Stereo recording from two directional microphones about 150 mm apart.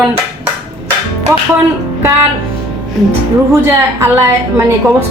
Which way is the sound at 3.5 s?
15° right (ahead or behind).